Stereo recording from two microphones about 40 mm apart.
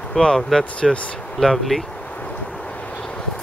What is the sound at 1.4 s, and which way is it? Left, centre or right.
Speech, centre.